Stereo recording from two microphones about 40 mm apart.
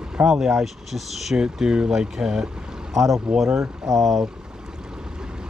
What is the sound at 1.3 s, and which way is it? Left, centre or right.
Speech, centre.